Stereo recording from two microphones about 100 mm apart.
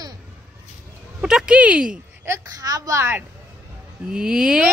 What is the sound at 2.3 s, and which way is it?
Speech, 40° right (ahead or behind).